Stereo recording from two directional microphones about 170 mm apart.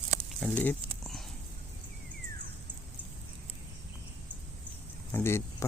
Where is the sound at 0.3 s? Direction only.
5° left (ahead or behind).